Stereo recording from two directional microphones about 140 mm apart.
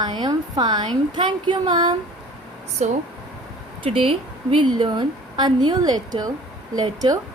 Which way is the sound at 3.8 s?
40° right (ahead or behind).